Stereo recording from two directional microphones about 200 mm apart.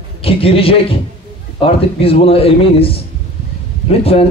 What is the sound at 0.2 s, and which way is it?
A man's voice, 30° left (ahead or behind).